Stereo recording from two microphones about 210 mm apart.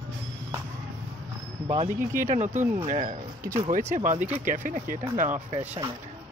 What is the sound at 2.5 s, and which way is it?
Speech, 10° right (ahead or behind).